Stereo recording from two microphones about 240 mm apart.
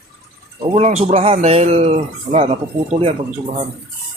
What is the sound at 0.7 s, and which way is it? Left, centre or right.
Speech, right.